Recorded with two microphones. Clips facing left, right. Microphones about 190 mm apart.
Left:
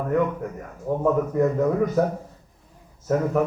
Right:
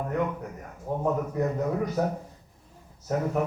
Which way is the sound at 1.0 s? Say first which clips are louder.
Left 6 dB; 55° left (ahead or behind).